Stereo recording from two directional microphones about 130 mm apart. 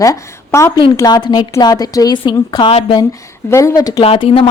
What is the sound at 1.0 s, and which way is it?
Speech, 35° left (ahead or behind).